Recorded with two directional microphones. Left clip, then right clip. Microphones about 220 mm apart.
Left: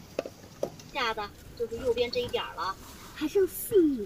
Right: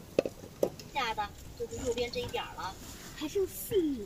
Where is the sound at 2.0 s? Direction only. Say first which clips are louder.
Left 5 dB; 50° left (ahead or behind).